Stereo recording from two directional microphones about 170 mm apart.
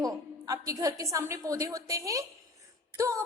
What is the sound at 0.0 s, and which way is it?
A woman's voice, 20° right (ahead or behind).